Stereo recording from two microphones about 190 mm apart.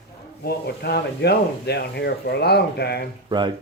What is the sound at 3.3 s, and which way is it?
Speech, 25° right (ahead or behind).